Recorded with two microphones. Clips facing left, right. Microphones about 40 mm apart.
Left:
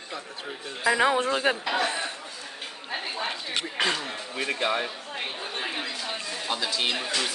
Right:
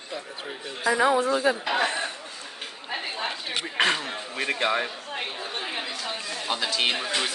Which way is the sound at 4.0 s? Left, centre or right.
Centre.